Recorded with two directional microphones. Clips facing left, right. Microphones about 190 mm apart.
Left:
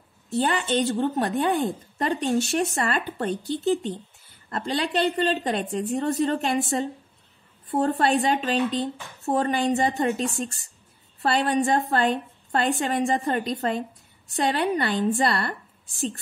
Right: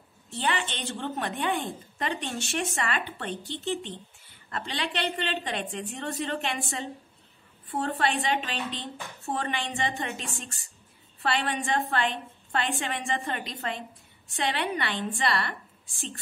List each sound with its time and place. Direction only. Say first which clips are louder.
0.3 s a woman's voice: left 7 dB; 40° left (ahead or behind)